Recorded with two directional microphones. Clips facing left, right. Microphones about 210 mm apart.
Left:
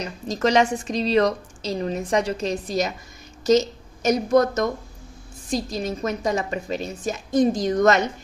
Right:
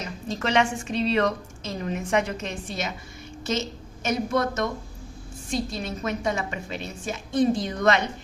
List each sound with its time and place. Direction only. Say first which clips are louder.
0.0 s a woman's voice: left 6 dB; 40° left (ahead or behind)